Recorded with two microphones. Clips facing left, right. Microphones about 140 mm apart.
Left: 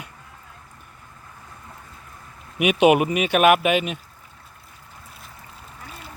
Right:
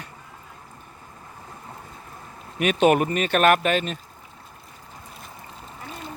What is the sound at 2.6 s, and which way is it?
Speech, 10° left (ahead or behind).